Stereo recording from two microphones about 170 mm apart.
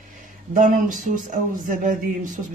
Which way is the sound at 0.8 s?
50° right (ahead or behind).